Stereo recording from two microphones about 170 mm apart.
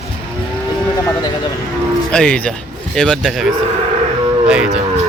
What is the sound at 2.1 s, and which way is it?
Speech, 5° left (ahead or behind).